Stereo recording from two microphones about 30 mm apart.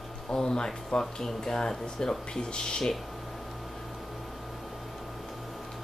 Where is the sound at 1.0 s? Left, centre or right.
Centre.